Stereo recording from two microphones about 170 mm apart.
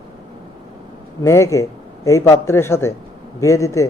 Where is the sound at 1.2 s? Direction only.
15° left (ahead or behind).